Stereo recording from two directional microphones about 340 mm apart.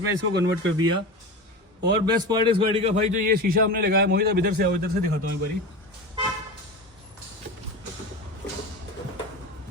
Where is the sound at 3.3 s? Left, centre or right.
Right.